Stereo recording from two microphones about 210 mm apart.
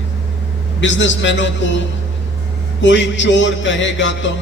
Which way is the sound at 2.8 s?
60° left (ahead or behind).